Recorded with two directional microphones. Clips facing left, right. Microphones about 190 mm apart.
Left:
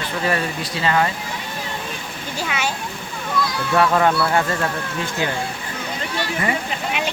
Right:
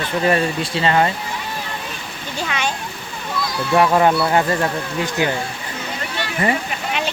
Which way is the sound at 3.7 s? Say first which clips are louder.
Right 2 dB; 20° right (ahead or behind).